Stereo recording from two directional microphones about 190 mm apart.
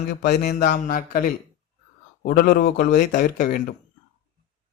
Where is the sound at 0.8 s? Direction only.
45° left (ahead or behind).